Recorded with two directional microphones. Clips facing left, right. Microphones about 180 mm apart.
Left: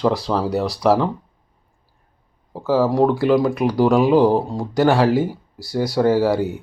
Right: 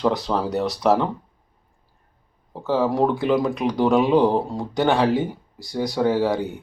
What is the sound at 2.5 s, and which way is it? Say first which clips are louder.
Speech: left 4 dB; 5° left (ahead or behind).